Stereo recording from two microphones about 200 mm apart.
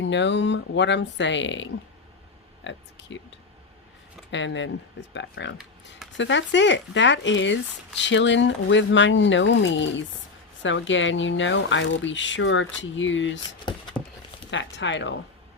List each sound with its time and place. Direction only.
0.0 s speech: 65° left (ahead or behind)
4.3 s speech: 65° left (ahead or behind)
14.0 s clip-clop: 5° left (ahead or behind)
14.5 s speech: 65° left (ahead or behind)